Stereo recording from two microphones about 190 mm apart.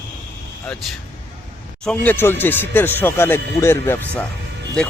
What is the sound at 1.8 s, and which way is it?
Speech, 5° left (ahead or behind).